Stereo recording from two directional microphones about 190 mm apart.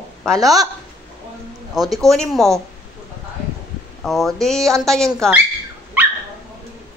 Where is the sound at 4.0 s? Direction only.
Centre (ahead or behind).